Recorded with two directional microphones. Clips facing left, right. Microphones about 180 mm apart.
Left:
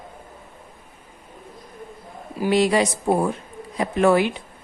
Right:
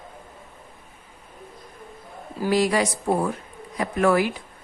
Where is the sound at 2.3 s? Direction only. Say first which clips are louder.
Left 2 dB; 20° left (ahead or behind).